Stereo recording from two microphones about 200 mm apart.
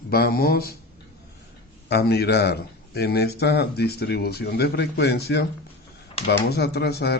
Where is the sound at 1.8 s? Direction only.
55° left (ahead or behind).